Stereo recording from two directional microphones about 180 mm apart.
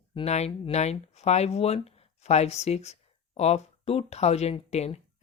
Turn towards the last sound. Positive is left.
turn(degrees=35)  # may be behind; listen again after turning